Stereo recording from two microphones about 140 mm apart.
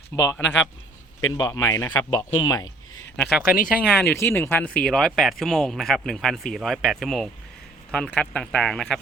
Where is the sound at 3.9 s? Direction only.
15° left (ahead or behind).